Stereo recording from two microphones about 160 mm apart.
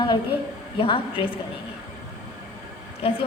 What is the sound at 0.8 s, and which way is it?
Speech, 35° left (ahead or behind).